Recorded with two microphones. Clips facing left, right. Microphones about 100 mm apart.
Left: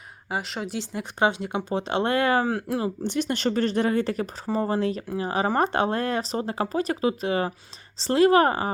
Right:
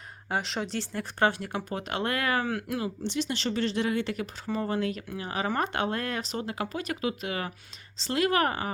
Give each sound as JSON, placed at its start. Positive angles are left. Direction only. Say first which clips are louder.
{"t": 0.3, "sound": "speech", "louder": "left 1 dB", "side_deg": 0}
{"t": 0.8, "sound": "speech", "louder": "left 3 dB", "side_deg": 15}
{"t": 3.0, "sound": "speech", "louder": "left 5 dB", "side_deg": 50}